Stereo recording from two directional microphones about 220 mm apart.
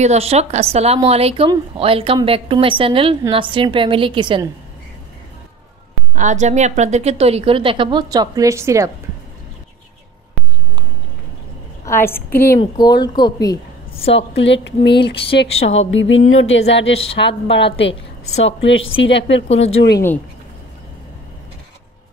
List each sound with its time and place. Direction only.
0.0 s speech: 30° right (ahead or behind)
6.1 s speech: 35° right (ahead or behind); by 8.9 s 15° right (ahead or behind)
11.8 s a woman's voice: 10° left (ahead or behind)
14.1 s a woman's voice: 55° left (ahead or behind)